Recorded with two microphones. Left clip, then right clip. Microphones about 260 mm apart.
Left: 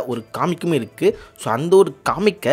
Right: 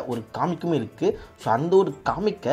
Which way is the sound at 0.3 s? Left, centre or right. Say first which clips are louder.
Left 4 dB; left.